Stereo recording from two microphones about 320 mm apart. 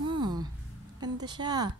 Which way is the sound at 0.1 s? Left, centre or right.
Centre.